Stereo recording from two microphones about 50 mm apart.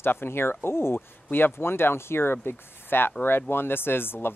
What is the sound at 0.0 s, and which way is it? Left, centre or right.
Speech, left.